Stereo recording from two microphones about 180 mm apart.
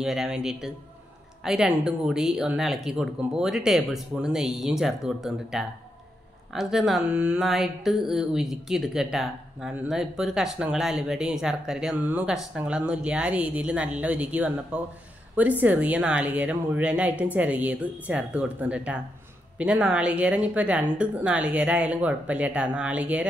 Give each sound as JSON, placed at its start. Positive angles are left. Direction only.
{"t": 0.0, "sound": "a woman's voice", "side_deg": 0}